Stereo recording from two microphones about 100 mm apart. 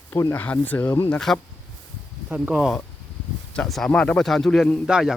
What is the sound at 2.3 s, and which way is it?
Speech, 15° right (ahead or behind).